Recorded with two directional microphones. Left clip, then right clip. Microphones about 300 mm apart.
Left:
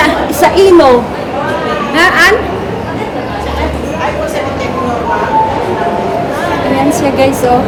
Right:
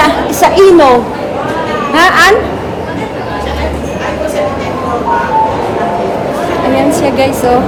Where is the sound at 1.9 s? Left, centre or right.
Centre.